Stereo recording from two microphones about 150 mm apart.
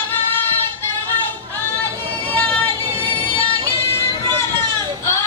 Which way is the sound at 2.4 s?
10° left (ahead or behind).